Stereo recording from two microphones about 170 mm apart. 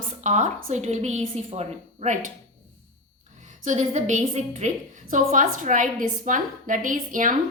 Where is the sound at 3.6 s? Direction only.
45° right (ahead or behind).